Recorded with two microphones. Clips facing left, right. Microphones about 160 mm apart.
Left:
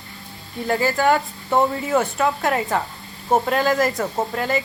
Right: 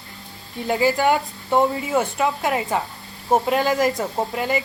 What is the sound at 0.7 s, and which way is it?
Speech, 15° right (ahead or behind).